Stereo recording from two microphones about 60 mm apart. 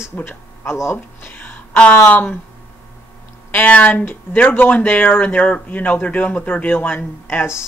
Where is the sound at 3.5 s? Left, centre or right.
Left.